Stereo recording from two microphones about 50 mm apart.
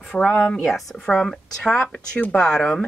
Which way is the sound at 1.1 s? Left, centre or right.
Centre.